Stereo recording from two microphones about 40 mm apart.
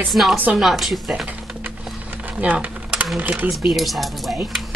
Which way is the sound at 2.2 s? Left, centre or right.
Right.